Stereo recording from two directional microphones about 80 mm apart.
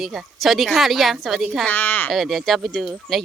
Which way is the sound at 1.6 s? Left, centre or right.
Left.